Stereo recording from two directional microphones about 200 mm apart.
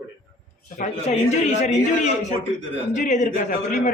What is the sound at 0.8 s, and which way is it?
Speech, 35° left (ahead or behind).